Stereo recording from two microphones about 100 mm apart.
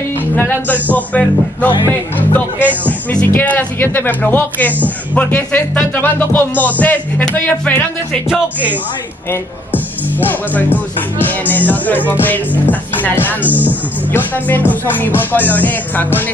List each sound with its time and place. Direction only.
0.4 s music: 20° left (ahead or behind)
1.9 s speech: 20° left (ahead or behind)
2.8 s music: 15° left (ahead or behind)
9.3 s speech: 20° left (ahead or behind)
11.2 s music: 20° left (ahead or behind)